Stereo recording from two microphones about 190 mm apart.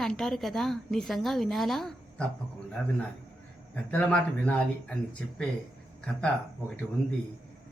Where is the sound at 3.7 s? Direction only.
10° left (ahead or behind).